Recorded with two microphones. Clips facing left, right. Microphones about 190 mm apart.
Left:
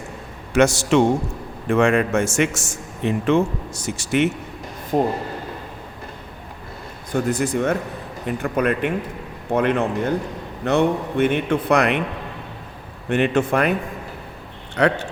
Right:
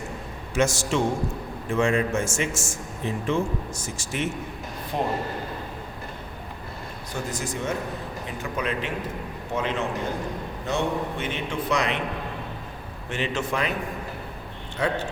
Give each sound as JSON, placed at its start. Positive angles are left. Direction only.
{"t": 0.5, "sound": "a man's voice", "side_deg": 70}
{"t": 4.9, "sound": "speech", "side_deg": 40}
{"t": 7.1, "sound": "a man's voice", "side_deg": 60}
{"t": 13.1, "sound": "a man's voice", "side_deg": 60}
{"t": 14.8, "sound": "a man's voice", "side_deg": 75}